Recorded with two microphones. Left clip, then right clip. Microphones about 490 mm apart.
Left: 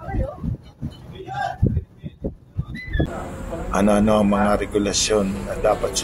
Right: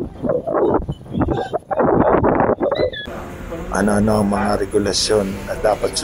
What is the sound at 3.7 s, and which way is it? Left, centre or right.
Speech, left.